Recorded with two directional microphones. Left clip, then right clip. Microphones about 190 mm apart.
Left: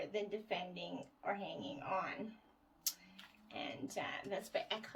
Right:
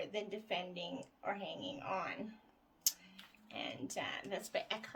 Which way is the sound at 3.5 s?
35° right (ahead or behind).